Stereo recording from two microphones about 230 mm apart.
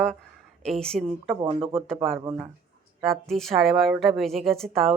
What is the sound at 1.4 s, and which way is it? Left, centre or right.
Speech, right.